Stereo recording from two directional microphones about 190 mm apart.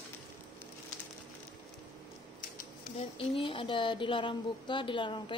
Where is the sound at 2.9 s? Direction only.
30° left (ahead or behind).